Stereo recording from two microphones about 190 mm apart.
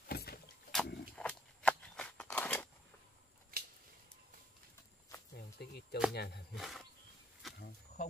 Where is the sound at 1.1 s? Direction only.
5° left (ahead or behind).